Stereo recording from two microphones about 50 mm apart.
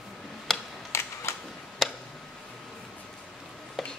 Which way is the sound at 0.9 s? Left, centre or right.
Left.